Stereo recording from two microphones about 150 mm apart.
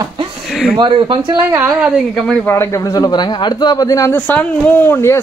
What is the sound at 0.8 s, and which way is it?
Speech, 30° right (ahead or behind).